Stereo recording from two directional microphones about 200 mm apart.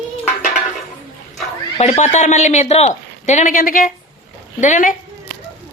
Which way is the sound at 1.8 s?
35° left (ahead or behind).